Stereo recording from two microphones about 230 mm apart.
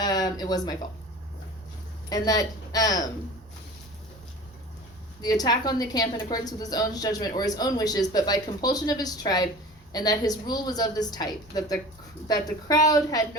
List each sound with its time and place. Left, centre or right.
0.0 s speech: centre
2.0 s a woman's voice: centre
5.2 s a woman's voice: centre